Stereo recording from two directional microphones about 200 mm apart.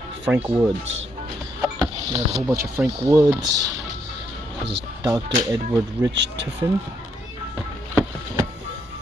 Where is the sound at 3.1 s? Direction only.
15° right (ahead or behind).